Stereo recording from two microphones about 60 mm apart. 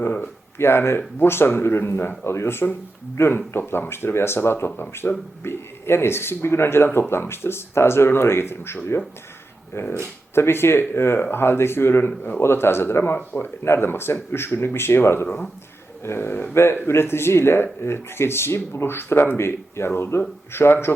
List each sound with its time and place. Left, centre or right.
0.6 s speech: left